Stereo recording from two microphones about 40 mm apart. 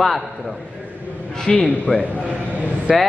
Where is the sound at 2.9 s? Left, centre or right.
Centre.